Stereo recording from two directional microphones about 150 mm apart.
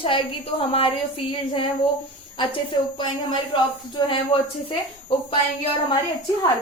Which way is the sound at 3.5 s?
35° left (ahead or behind).